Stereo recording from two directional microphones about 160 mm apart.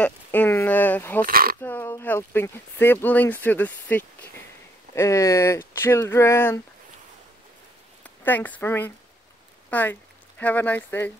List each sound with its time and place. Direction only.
0.0 s a sound: 10° left (ahead or behind)
1.2 s speech: 65° right (ahead or behind)
1.6 s speech: 10° left (ahead or behind)
8.0 s speech: 10° left (ahead or behind)